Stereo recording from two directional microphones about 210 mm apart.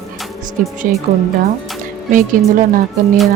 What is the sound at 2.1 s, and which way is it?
Speech, 40° right (ahead or behind).